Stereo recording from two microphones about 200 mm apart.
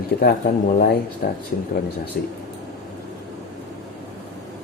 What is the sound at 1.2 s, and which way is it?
Speech, 45° left (ahead or behind).